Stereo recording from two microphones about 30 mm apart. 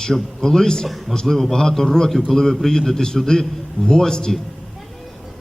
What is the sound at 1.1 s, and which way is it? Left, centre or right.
A man's voice, centre.